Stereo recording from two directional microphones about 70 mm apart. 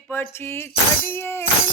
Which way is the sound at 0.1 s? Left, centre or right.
Left.